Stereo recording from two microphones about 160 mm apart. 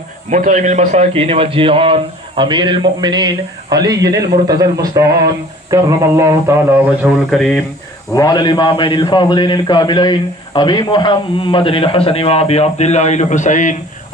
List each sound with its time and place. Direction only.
0.3 s a man's voice: 50° right (ahead or behind); by 6.6 s 15° right (ahead or behind)
7.1 s speech: centre (ahead or behind)
8.1 s a man's voice: 25° left (ahead or behind); by 13.7 s 50° left (ahead or behind)